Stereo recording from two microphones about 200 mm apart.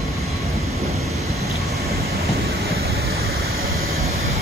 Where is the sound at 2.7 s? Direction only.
50° right (ahead or behind).